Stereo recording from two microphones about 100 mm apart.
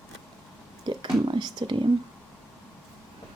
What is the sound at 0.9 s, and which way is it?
Speech, 50° right (ahead or behind).